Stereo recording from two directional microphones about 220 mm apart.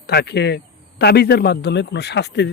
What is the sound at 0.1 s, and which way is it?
Speech, 50° left (ahead or behind).